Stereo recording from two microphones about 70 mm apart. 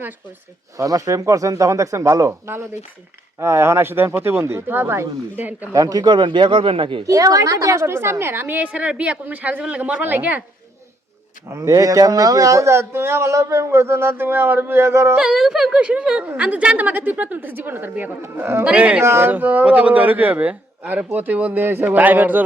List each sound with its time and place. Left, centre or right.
0.8 s speech: right
3.3 s a man's voice: right
5.7 s speech: right
7.0 s a woman's voice: right
11.4 s speech: right
11.7 s a man's voice: right
15.2 s a woman's voice: centre; by 18.6 s right
18.6 s a woman's voice: centre
19.0 s a man's voice: right
19.3 s a woman's voice: right